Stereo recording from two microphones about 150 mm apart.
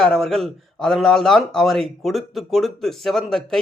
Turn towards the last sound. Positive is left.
turn(degrees=0)  # may be behind; listen again after turning